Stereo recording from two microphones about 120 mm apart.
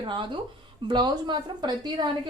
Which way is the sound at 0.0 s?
40° right (ahead or behind).